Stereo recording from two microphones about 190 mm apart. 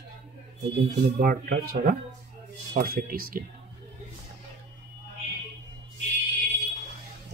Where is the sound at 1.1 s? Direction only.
50° right (ahead or behind).